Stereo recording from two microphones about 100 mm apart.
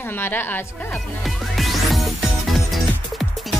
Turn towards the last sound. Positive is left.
turn(degrees=0)  # may be behind; listen again after turning